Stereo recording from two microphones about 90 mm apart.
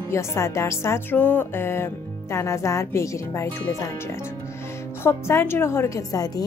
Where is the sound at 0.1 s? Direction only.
30° left (ahead or behind).